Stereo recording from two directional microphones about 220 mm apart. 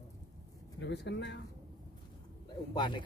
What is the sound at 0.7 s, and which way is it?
Speech, 50° left (ahead or behind).